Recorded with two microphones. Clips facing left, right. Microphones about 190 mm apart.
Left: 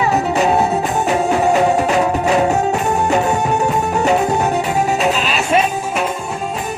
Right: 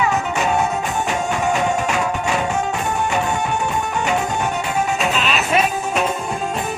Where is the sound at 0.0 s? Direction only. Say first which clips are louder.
Left 4 dB; 35° left (ahead or behind).